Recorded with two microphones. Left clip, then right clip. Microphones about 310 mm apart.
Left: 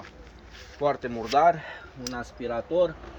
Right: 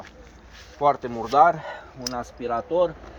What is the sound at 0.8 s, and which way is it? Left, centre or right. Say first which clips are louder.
Speech: right 5 dB; centre.